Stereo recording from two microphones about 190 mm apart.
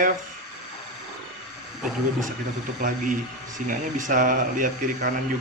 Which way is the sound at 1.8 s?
Centre (ahead or behind).